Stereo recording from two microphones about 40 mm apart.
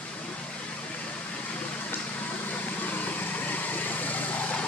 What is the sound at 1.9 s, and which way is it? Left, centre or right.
Vehicle, left.